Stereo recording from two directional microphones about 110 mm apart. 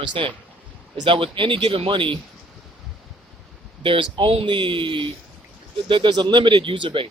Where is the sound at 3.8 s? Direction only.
50° right (ahead or behind).